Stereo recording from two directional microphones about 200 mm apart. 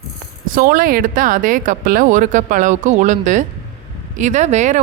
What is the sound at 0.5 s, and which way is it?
Speech, 45° right (ahead or behind).